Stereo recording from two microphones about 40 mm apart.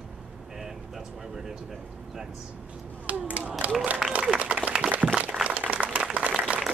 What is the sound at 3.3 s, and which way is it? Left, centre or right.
Speech, right.